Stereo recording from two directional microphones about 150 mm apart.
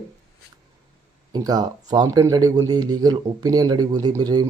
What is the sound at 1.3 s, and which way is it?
Speech, 25° right (ahead or behind).